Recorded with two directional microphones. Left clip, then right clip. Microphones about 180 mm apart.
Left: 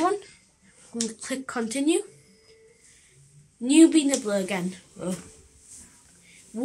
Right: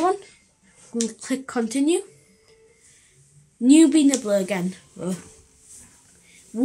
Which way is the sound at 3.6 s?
35° right (ahead or behind).